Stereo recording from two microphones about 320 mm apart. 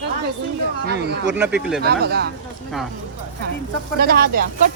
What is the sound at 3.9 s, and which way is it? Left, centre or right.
Speech, right.